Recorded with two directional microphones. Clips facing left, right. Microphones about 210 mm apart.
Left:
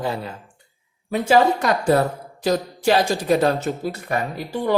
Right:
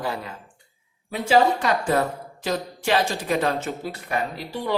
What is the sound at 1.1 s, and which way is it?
A woman's voice, 45° left (ahead or behind).